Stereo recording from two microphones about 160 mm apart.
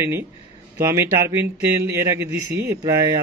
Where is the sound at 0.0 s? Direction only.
15° right (ahead or behind).